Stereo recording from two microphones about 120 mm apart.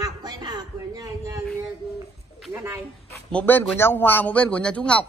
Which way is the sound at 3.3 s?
15° left (ahead or behind).